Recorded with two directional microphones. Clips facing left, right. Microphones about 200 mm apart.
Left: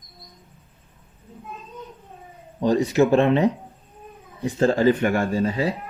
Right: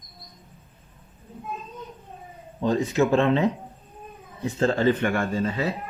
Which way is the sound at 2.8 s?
35° left (ahead or behind).